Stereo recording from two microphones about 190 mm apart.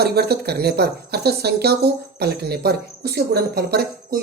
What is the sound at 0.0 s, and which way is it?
Speech, 55° right (ahead or behind).